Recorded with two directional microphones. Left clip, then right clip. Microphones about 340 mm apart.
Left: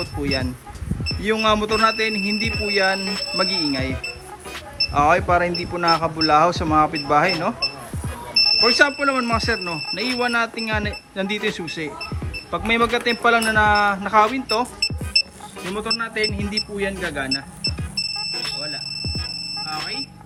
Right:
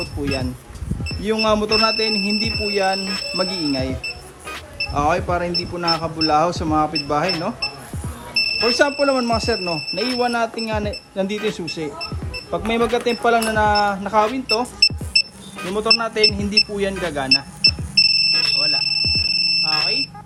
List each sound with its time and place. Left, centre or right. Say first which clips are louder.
0.0 s speech: even; centre
4.9 s speech: left 3 dB; centre
8.8 s speech: right 1 dB; centre
17.9 s smoke detector: right 11 dB; centre